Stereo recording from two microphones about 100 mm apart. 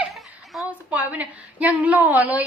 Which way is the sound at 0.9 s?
15° right (ahead or behind).